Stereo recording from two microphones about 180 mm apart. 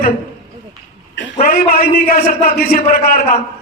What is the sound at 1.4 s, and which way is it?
A man's voice, 55° left (ahead or behind).